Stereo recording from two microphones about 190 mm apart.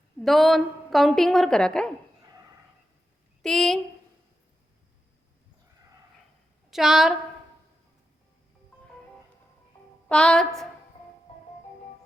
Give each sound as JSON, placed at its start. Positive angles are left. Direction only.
{"t": 0.2, "sound": "a woman's voice", "side_deg": 0}
{"t": 3.4, "sound": "a woman's voice", "side_deg": 0}
{"t": 6.7, "sound": "a woman's voice", "side_deg": 0}
{"t": 10.1, "sound": "a woman's voice", "side_deg": 5}